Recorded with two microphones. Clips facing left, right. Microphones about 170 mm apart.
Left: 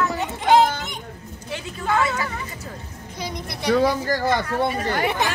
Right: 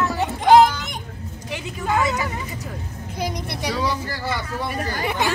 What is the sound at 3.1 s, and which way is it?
Speech, 50° right (ahead or behind).